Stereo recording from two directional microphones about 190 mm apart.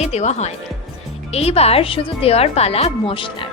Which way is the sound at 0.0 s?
35° left (ahead or behind).